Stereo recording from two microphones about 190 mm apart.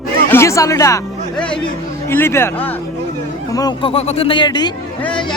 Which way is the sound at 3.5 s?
25° left (ahead or behind).